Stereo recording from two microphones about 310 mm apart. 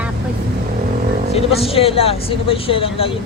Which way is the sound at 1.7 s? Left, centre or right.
Centre.